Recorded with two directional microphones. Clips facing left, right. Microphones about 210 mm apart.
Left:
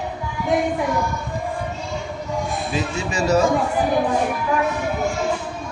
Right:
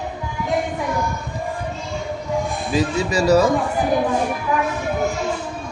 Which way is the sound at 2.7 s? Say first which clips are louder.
Right 7 dB; 40° right (ahead or behind).